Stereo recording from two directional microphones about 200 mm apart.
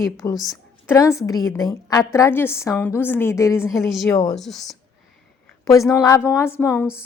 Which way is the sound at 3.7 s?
Centre (ahead or behind).